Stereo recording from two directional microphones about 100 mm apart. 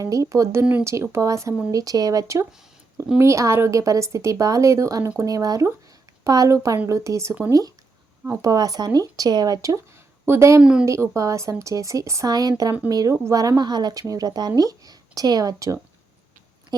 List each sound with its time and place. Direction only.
0.0 s speech: 35° right (ahead or behind)
0.6 s speech: 10° right (ahead or behind)
1.1 s speech: 30° right (ahead or behind)
8.4 s speech: 35° right (ahead or behind)
10.6 s speech: 10° right (ahead or behind)
10.8 s speech: 30° right (ahead or behind)